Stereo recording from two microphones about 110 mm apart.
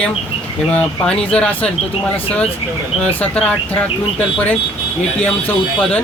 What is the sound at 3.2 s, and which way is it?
Speech, 15° left (ahead or behind).